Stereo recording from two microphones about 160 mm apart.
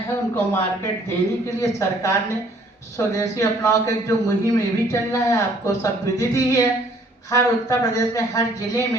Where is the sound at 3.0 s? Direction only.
20° left (ahead or behind).